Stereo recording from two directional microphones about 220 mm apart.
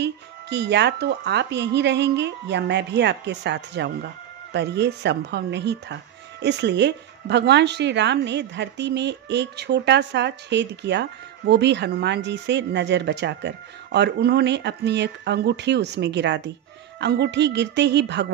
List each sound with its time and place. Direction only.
0.0 s a woman's voice: 50° right (ahead or behind)